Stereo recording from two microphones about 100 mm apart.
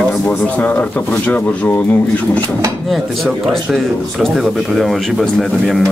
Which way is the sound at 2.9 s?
Centre (ahead or behind).